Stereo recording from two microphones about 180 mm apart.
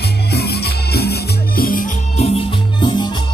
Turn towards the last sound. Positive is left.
turn(degrees=25)  # may be behind; listen again after turning